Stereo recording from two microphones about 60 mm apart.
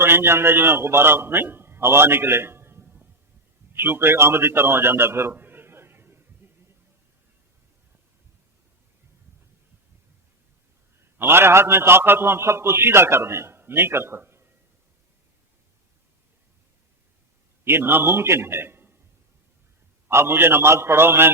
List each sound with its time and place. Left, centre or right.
0.0 s a man's voice: right
11.0 s a man's voice: right
17.7 s a man's voice: right
20.1 s a man's voice: right